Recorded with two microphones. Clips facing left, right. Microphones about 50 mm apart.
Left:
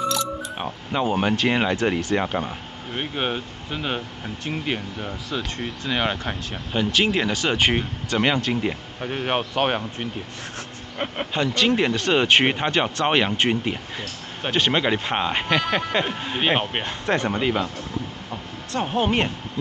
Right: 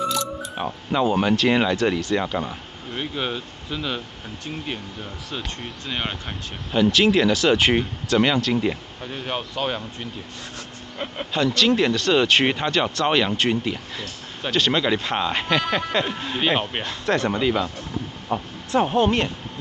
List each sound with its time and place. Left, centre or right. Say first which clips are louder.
0.9 s speech: right 2 dB; centre
3.0 s speech: left 1 dB; left
4.5 s speech: left 4 dB; left
5.9 s speech: left 5 dB; centre
8.3 s speech: right 1 dB; centre
9.0 s speech: left 5 dB; left
11.3 s speech: right 2 dB; centre
15.4 s speech: even; centre
18.3 s speech: right 11 dB; right
18.7 s speech: right 6 dB; centre
19.0 s speech: right 1 dB; left